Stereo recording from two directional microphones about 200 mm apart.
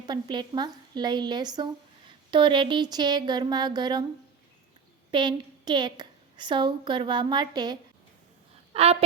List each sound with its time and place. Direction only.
0.0 s speech: 20° right (ahead or behind)
5.1 s a woman's voice: 20° right (ahead or behind)